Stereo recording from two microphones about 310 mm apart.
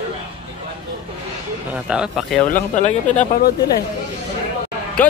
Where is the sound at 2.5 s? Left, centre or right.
Left.